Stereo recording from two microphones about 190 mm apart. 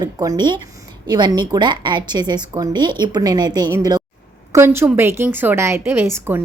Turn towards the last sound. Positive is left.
turn(degrees=-15)  # may be behind; listen again after turning